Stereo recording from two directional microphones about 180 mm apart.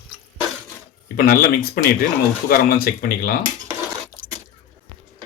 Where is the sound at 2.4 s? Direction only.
55° left (ahead or behind).